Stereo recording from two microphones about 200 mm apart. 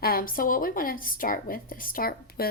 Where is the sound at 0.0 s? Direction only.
45° left (ahead or behind).